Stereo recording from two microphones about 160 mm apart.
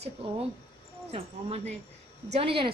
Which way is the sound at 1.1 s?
40° right (ahead or behind).